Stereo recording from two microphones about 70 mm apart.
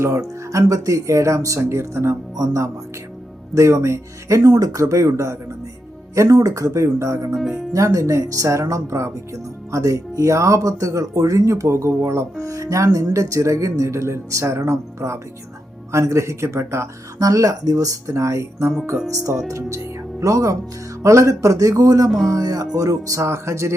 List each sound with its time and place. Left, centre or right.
0.0 s speech: right
2.3 s speech: right
17.2 s speech: right
22.1 s music: centre
22.4 s speech: right